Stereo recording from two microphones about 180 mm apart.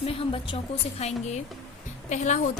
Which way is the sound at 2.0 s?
40° left (ahead or behind).